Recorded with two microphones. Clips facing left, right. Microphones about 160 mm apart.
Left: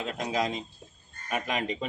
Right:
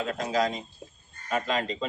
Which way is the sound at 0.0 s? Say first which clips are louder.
Right 3 dB; 20° left (ahead or behind).